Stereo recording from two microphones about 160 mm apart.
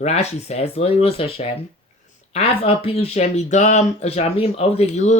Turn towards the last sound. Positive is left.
turn(degrees=45)  # may be behind; listen again after turning